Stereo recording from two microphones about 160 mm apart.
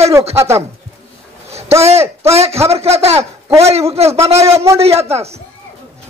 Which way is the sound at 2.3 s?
40° right (ahead or behind).